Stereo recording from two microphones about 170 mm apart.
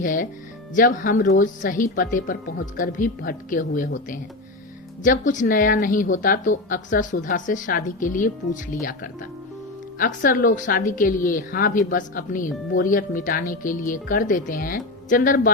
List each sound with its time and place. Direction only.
0.0 s a woman's voice: 50° left (ahead or behind)